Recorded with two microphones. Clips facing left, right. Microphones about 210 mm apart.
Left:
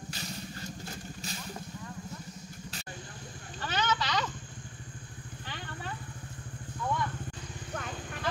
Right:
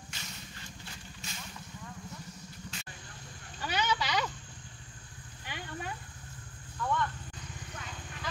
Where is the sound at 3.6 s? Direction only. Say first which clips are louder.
Even; 10° right (ahead or behind).